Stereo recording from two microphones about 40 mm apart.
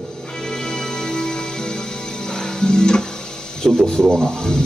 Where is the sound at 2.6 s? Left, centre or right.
Centre.